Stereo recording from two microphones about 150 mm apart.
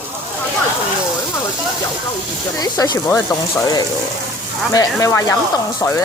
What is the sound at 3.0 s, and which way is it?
Speech, 15° left (ahead or behind).